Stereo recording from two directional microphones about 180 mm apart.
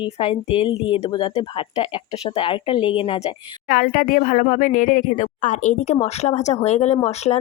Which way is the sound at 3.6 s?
50° left (ahead or behind).